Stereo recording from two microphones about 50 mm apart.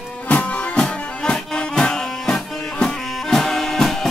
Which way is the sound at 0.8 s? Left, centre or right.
Centre.